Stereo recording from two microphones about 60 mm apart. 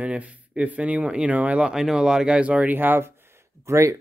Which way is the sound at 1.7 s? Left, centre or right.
Centre.